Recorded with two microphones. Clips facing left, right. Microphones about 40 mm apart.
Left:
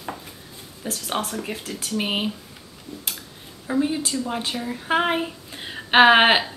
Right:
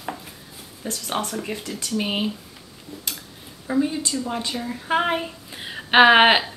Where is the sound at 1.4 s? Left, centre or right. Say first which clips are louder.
Right 1 dB; centre.